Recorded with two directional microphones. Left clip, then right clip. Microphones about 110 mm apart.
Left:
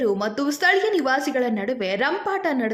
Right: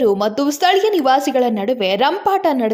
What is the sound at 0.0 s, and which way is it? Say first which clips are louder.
A woman's voice: right 7 dB; 30° right (ahead or behind).